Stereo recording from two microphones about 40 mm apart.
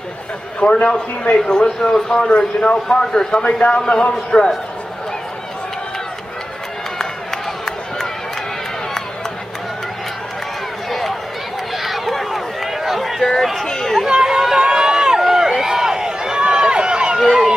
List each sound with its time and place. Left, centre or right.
0.6 s a man's voice: left; by 2.1 s centre
2.1 s a man's voice: left
7.0 s run: centre
10.9 s run: centre
13.2 s chatter: centre
14.0 s run: centre